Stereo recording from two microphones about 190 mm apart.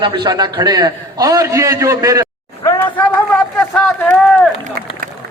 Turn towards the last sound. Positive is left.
turn(degrees=-55)  # may be behind; listen again after turning